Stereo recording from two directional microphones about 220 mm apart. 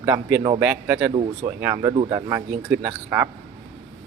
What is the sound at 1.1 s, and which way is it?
Speech, 25° right (ahead or behind).